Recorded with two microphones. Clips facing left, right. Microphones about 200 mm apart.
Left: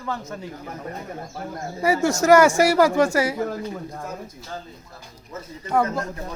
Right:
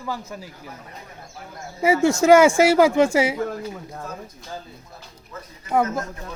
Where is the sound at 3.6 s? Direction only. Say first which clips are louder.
Left 2 dB; 5° right (ahead or behind).